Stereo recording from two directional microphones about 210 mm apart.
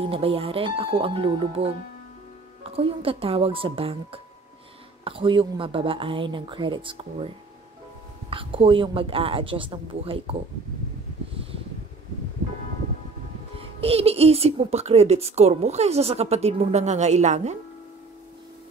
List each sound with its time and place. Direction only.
0.0 s speech: 25° right (ahead or behind)
8.3 s speech: 25° right (ahead or behind)
13.6 s speech: 30° right (ahead or behind)